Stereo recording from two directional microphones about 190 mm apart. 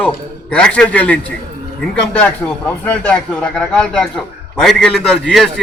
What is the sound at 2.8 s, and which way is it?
A man's voice, 5° left (ahead or behind).